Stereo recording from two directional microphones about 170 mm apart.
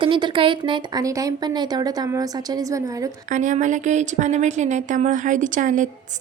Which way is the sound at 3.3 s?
45° right (ahead or behind).